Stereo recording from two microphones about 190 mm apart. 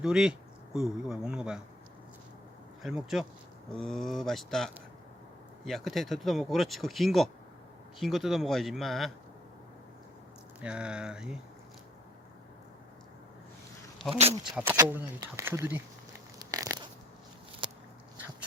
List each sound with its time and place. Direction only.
0.0 s speech: 5° right (ahead or behind)
2.8 s speech: centre (ahead or behind)
10.6 s speech: 5° right (ahead or behind)
14.1 s speech: 30° right (ahead or behind)
14.5 s speech: 10° right (ahead or behind)
16.4 s crunch: 20° right (ahead or behind)
17.6 s biting: 25° right (ahead or behind)